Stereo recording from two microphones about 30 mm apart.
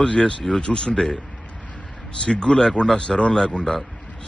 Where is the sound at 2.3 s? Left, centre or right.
Left.